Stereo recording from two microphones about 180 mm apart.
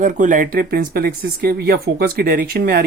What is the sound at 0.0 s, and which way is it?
Speech, 45° right (ahead or behind).